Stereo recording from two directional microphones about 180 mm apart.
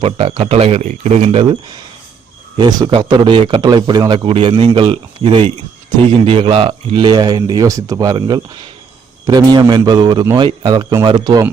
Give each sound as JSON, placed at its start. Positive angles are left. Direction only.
{"t": 0.0, "sound": "a man's voice", "side_deg": -35}